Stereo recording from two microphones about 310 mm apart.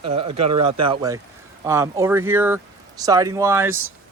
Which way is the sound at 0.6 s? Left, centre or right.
Right.